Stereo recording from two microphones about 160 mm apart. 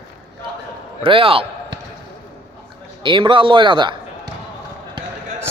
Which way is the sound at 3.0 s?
30° right (ahead or behind).